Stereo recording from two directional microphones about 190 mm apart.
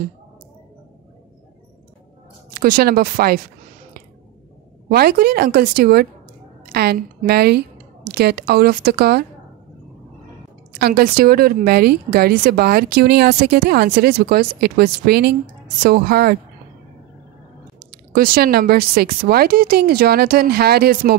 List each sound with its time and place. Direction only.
2.5 s speech: 50° right (ahead or behind)
4.9 s speech: 55° right (ahead or behind)
10.8 s speech: 55° right (ahead or behind)
17.9 s speech: 50° right (ahead or behind)